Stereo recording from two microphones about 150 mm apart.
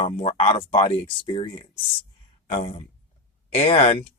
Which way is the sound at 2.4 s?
55° left (ahead or behind).